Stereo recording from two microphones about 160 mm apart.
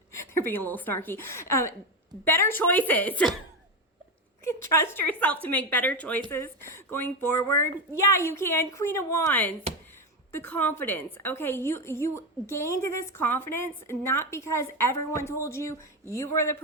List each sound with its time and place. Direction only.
0.1 s a woman's voice: 15° left (ahead or behind)
4.4 s a woman's voice: 15° left (ahead or behind)